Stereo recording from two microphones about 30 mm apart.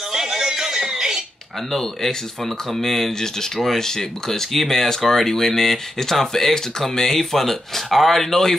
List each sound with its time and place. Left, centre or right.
0.1 s music: centre
1.7 s speech: centre